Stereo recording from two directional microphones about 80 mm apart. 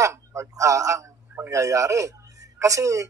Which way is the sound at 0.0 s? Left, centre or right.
Right.